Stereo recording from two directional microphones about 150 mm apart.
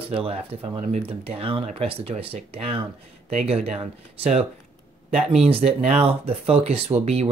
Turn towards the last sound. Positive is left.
turn(degrees=-45)  # may be behind; listen again after turning